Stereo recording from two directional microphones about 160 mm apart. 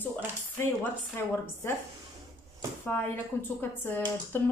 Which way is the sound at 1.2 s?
15° left (ahead or behind).